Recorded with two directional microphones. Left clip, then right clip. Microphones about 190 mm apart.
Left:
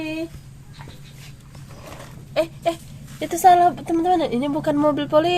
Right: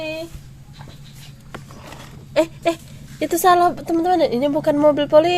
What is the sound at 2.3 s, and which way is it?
Speech, 50° right (ahead or behind).